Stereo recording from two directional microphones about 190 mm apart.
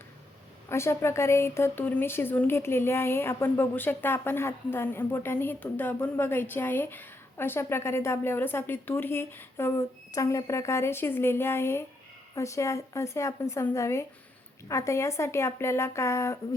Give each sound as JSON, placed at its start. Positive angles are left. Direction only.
{"t": 0.7, "sound": "a woman's voice", "side_deg": 15}